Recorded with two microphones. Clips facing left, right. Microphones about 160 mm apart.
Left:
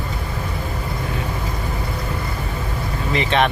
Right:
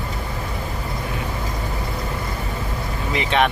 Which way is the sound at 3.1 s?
10° right (ahead or behind).